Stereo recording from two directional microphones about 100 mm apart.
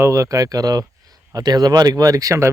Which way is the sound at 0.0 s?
30° right (ahead or behind).